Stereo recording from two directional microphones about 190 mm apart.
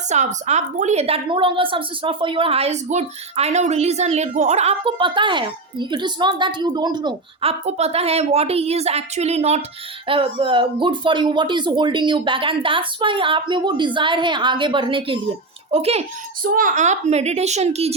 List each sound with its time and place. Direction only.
0.1 s a woman's voice: 35° right (ahead or behind)
7.6 s a woman's voice: 35° right (ahead or behind)
16.4 s a woman's voice: 45° right (ahead or behind)